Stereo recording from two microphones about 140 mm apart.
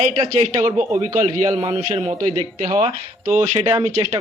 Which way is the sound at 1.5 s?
50° right (ahead or behind).